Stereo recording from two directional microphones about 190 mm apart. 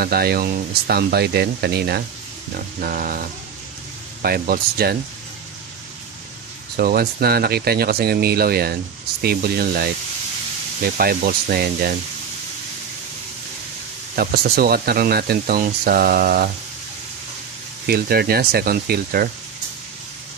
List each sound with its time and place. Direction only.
0.0 s speech: 55° right (ahead or behind)
6.8 s speech: 55° right (ahead or behind)
11.0 s speech: 50° right (ahead or behind)
14.1 s speech: 50° right (ahead or behind)
17.8 s speech: 55° right (ahead or behind)